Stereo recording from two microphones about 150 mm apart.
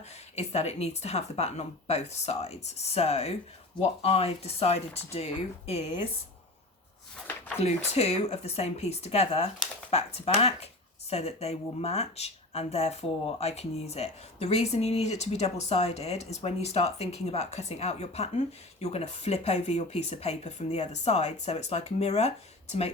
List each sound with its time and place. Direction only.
0.3 s speech: 45° left (ahead or behind)
7.6 s speech: 45° left (ahead or behind)